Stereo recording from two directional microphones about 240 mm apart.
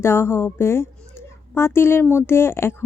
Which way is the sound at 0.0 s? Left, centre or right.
Centre.